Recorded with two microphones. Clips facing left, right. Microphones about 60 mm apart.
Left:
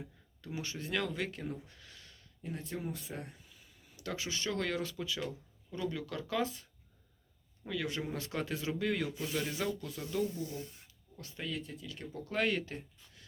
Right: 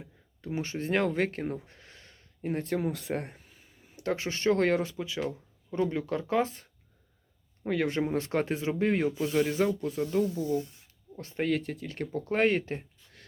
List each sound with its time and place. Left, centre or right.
0.4 s speech: right
2.4 s speech: right
3.6 s speech: right
4.8 s speech: right
11.4 s speech: right
11.9 s speech: right
12.2 s speech: right